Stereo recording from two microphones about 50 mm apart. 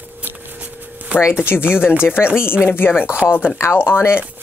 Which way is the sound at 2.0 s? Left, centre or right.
Left.